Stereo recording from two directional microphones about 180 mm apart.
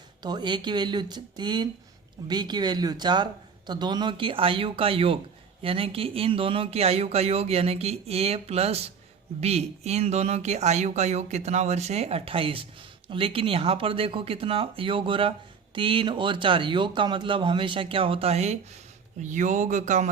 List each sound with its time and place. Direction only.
0.2 s speech: 25° right (ahead or behind); by 20.1 s 40° right (ahead or behind)